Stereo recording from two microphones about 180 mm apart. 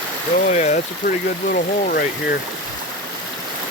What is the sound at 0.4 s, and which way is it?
Speech, 40° left (ahead or behind).